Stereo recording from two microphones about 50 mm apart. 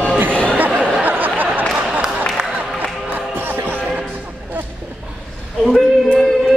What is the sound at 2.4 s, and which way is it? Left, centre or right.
Music, centre.